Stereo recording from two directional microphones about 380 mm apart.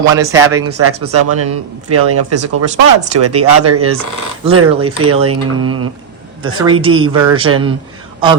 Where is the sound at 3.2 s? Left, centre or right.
Right.